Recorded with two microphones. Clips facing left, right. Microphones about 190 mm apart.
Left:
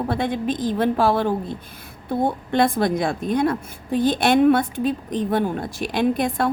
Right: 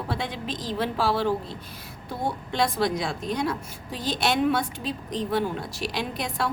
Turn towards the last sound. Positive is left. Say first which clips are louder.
# left 9 dB
turn(degrees=50)  # may be behind; listen again after turning